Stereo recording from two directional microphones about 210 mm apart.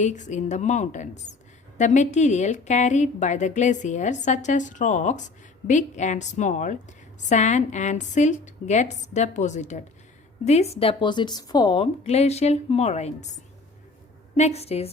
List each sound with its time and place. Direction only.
0.0 s a woman's voice: 35° left (ahead or behind)
14.3 s a woman's voice: 30° left (ahead or behind)